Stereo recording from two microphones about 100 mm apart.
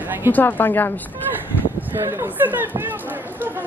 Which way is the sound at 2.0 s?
30° right (ahead or behind).